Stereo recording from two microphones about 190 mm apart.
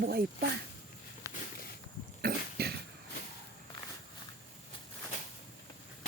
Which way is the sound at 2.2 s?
55° right (ahead or behind).